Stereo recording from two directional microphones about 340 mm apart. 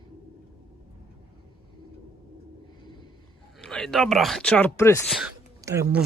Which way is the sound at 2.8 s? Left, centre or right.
Centre.